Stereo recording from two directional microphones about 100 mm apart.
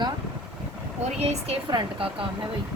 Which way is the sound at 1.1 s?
90° right.